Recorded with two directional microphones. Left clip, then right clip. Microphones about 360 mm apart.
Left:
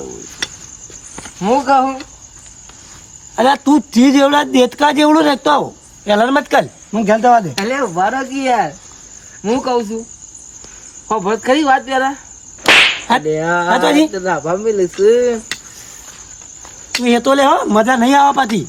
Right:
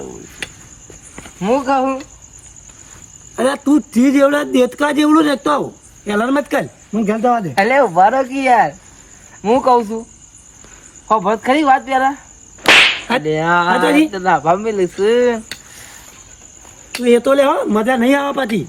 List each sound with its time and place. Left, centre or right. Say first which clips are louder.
1.1 s speech: left 2 dB; centre
3.3 s a man's voice: left 3 dB; centre
7.7 s speech: right 5 dB; centre
11.1 s speech: right 1 dB; centre
12.6 s whip: even; centre
13.7 s a man's voice: left 1 dB; centre
14.5 s speech: left 1 dB; right
16.9 s a man's voice: right 1 dB; centre